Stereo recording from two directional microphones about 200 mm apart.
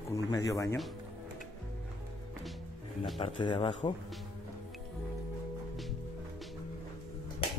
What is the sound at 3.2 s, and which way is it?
Speech, 25° left (ahead or behind).